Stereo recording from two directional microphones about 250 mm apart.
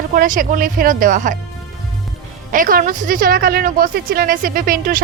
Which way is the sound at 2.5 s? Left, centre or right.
Right.